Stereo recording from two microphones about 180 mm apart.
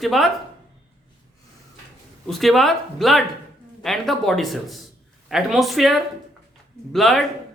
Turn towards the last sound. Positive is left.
turn(degrees=0)  # may be behind; listen again after turning